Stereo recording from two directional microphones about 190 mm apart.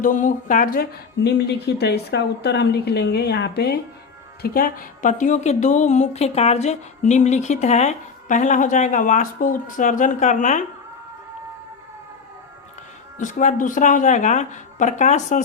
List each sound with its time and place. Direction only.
0.0 s speech: 45° left (ahead or behind)
13.1 s speech: 40° left (ahead or behind)